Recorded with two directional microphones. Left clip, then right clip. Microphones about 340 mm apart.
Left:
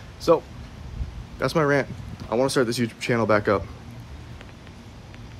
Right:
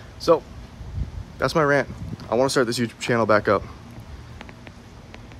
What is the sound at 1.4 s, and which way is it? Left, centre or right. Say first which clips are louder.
Speech: right 2 dB; centre.